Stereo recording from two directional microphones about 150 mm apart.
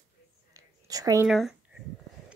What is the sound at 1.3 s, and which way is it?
Speech, centre (ahead or behind).